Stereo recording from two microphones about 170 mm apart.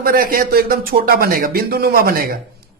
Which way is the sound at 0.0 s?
55° right (ahead or behind).